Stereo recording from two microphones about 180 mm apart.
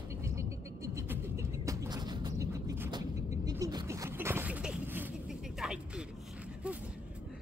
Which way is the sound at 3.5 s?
20° right (ahead or behind).